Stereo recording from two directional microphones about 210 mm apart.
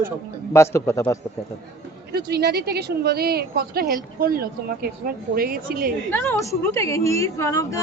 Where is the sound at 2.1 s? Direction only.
50° right (ahead or behind).